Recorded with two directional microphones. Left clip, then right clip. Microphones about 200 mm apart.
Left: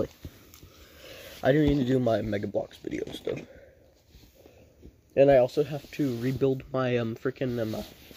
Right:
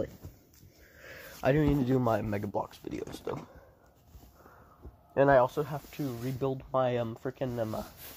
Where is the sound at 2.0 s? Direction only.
60° right (ahead or behind).